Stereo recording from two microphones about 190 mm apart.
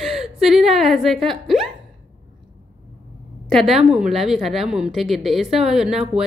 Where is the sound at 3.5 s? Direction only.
Centre (ahead or behind).